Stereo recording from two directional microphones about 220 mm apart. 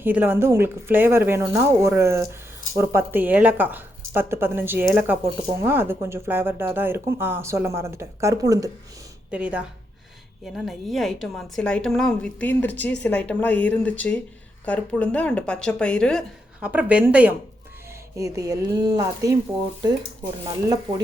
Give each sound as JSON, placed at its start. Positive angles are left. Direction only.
{"t": 0.0, "sound": "a woman's voice", "side_deg": -10}